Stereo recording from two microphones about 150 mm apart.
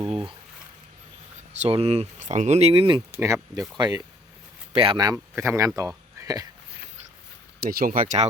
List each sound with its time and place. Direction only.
0.0 s speech: 35° right (ahead or behind)
1.5 s speech: 45° right (ahead or behind)
3.1 s speech: 15° right (ahead or behind)
3.8 s speech: 30° right (ahead or behind)
7.6 s speech: 90° right; by 8.3 s 60° right (ahead or behind)